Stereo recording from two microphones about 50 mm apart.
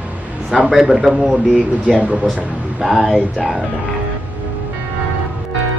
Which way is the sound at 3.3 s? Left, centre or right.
Centre.